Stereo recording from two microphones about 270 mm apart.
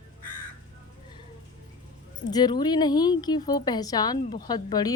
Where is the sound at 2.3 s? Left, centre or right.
Centre.